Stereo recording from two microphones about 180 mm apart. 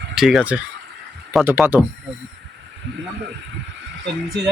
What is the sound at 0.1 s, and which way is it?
Speech, 5° right (ahead or behind).